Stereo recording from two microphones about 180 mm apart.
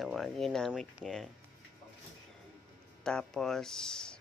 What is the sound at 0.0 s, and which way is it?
Speech, centre (ahead or behind).